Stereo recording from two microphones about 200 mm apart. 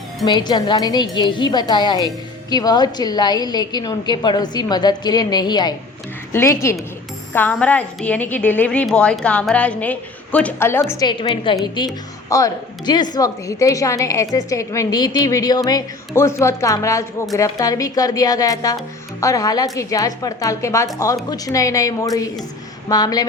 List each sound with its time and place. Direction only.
0.3 s a woman's voice: 20° left (ahead or behind)